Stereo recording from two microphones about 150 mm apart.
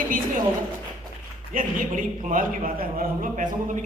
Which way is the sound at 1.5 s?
65° right (ahead or behind).